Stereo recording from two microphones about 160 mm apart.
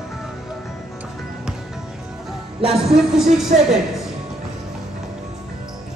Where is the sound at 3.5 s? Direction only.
55° right (ahead or behind).